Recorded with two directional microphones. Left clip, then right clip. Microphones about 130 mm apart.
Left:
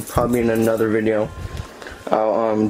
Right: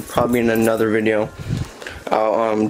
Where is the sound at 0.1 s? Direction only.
15° right (ahead or behind).